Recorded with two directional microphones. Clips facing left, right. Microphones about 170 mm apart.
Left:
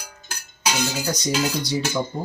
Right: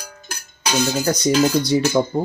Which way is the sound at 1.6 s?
55° right (ahead or behind).